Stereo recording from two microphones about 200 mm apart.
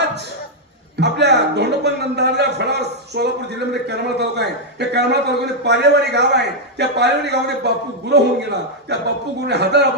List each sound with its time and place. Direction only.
0.9 s a man's voice: 60° right (ahead or behind)